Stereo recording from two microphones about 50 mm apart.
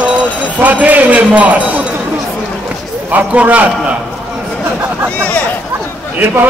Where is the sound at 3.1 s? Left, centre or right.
Right.